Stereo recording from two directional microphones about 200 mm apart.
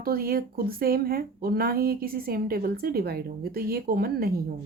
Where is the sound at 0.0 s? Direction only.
45° right (ahead or behind).